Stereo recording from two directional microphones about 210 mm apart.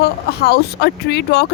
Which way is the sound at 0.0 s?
50° left (ahead or behind).